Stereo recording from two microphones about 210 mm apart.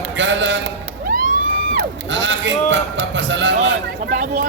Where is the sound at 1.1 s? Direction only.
40° right (ahead or behind).